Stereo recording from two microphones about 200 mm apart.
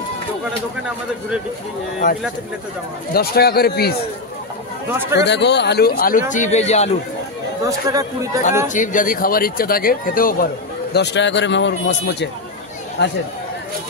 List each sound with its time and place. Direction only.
3.1 s speech: 50° left (ahead or behind)
5.2 s speech: 60° left (ahead or behind); by 6.9 s 35° left (ahead or behind)
7.6 s speech: 15° right (ahead or behind)
8.6 s speech: 40° left (ahead or behind); by 13.1 s 60° left (ahead or behind)